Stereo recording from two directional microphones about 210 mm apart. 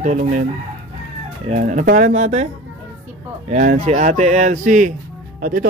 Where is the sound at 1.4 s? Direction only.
35° right (ahead or behind).